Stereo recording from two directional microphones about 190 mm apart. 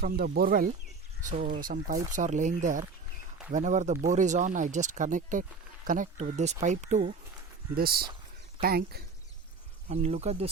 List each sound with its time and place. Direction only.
0.0 s speech: 50° right (ahead or behind)
7.8 s speech: 55° right (ahead or behind)
9.9 s speech: 35° right (ahead or behind)